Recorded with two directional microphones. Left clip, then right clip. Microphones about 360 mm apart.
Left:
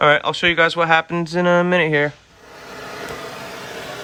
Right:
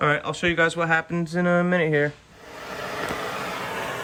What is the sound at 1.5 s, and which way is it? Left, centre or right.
Speech, right.